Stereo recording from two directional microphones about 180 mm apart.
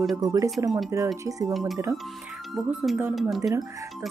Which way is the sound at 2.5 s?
Centre (ahead or behind).